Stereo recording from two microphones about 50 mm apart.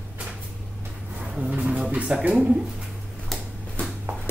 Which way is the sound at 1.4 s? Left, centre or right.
Right.